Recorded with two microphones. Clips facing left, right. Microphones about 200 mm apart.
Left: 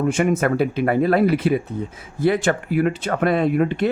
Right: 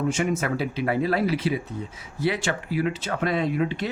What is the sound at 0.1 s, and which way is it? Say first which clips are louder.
Speech: left 6 dB; 55° left (ahead or behind).